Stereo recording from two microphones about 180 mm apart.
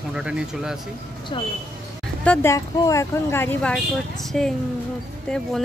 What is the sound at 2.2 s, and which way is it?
Speech, 15° left (ahead or behind).